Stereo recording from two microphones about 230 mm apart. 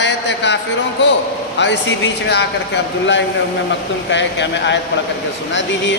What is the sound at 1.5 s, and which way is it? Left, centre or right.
Speech, left.